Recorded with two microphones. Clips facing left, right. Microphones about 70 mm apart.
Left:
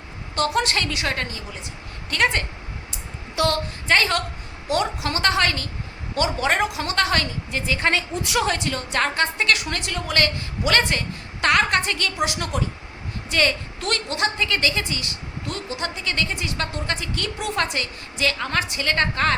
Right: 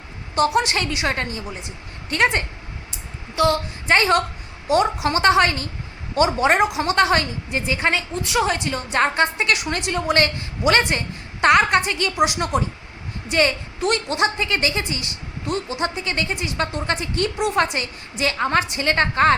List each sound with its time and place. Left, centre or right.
0.3 s a woman's voice: centre
3.3 s a woman's voice: centre
3.8 s a woman's voice: right
7.9 s a woman's voice: centre
8.4 s a woman's voice: centre